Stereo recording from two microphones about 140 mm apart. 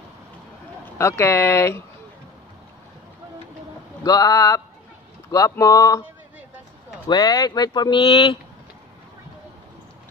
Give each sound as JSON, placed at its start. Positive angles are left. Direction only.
{"t": 0.9, "sound": "speech", "side_deg": 20}
{"t": 4.0, "sound": "speech", "side_deg": 25}
{"t": 7.1, "sound": "speech", "side_deg": 30}